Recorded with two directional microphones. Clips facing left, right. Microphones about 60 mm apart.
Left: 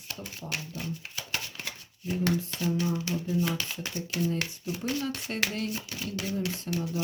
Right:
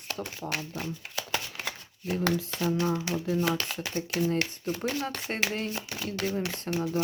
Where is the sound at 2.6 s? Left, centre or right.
Right.